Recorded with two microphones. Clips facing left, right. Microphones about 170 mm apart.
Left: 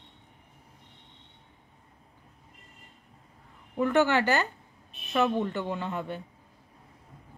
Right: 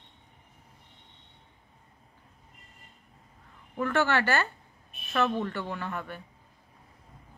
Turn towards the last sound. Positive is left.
turn(degrees=20)  # may be behind; listen again after turning